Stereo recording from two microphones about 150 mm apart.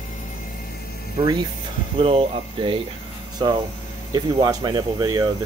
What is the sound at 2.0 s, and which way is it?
Speech, 40° right (ahead or behind).